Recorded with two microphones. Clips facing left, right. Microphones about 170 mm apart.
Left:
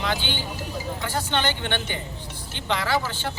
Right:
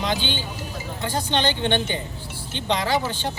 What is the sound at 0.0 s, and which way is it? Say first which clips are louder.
Speech: right 2 dB; 20° right (ahead or behind).